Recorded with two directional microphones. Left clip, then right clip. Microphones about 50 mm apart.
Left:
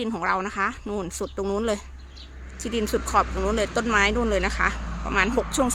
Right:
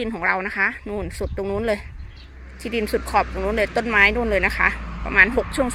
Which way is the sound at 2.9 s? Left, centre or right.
Centre.